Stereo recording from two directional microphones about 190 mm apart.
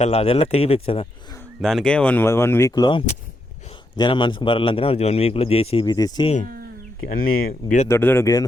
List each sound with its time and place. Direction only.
0.0 s speech: 35° left (ahead or behind)
1.6 s a man's voice: 5° left (ahead or behind); by 6.3 s 20° left (ahead or behind)
7.1 s speech: 50° left (ahead or behind)
7.9 s speech: 15° left (ahead or behind)